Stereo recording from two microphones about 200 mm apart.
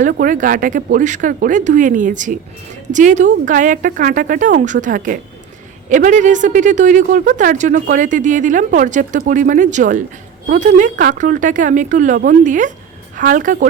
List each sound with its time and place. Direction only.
0.0 s speech: 45° right (ahead or behind)